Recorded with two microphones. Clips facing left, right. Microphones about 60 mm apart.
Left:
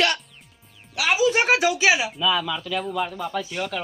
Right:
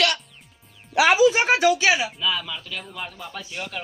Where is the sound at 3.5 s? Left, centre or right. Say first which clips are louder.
Left 4 dB; left.